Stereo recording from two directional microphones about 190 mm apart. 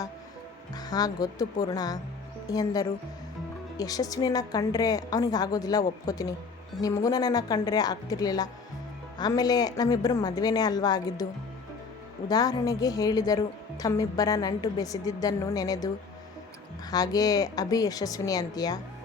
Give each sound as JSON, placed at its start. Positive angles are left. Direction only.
{"t": 0.7, "sound": "a woman's voice", "side_deg": 20}
{"t": 12.3, "sound": "a woman's voice", "side_deg": 20}
{"t": 16.9, "sound": "a woman's voice", "side_deg": 20}